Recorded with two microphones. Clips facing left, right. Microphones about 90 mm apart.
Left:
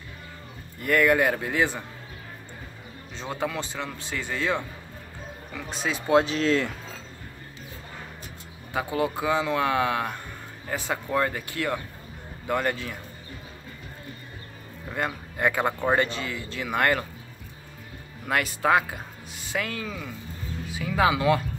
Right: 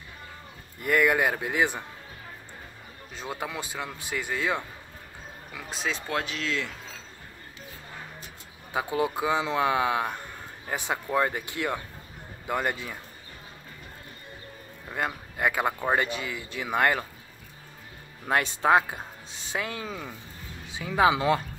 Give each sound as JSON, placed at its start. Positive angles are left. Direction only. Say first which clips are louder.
{"t": 0.8, "sound": "speech", "louder": "left 2 dB", "side_deg": -15}
{"t": 3.2, "sound": "speech", "louder": "left 4 dB", "side_deg": -10}
{"t": 6.0, "sound": "speech", "louder": "left 14 dB", "side_deg": 25}
{"t": 6.3, "sound": "speech", "louder": "left 8 dB", "side_deg": 40}
{"t": 8.7, "sound": "speech", "louder": "left 1 dB", "side_deg": -15}
{"t": 14.9, "sound": "speech", "louder": "left 1 dB", "side_deg": -5}
{"t": 18.2, "sound": "speech", "louder": "even", "side_deg": -30}